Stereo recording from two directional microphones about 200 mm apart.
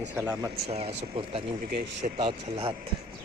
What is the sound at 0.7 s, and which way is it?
Speech, 30° right (ahead or behind).